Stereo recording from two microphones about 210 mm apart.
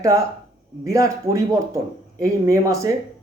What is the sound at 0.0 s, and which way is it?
Speech, 15° right (ahead or behind).